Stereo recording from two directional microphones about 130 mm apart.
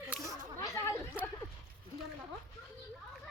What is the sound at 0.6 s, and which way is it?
Chatter, 25° left (ahead or behind).